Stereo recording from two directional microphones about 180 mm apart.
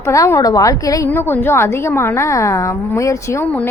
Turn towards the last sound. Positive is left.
turn(degrees=15)  # may be behind; listen again after turning